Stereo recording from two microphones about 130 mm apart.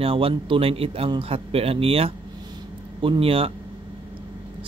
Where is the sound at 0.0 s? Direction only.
45° right (ahead or behind).